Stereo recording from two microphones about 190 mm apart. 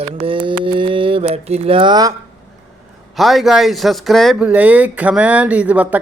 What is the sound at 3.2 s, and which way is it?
Speech, centre (ahead or behind).